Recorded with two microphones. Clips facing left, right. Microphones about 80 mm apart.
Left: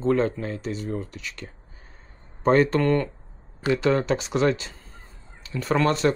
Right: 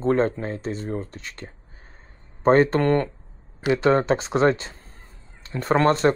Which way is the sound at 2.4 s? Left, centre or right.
Right.